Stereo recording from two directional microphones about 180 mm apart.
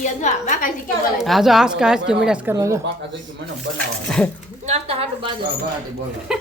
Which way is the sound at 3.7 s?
5° left (ahead or behind).